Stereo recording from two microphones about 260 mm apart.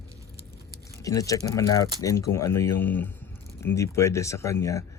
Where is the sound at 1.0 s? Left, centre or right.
Centre.